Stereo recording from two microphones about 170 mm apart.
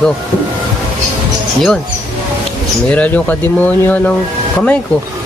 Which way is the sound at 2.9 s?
10° left (ahead or behind).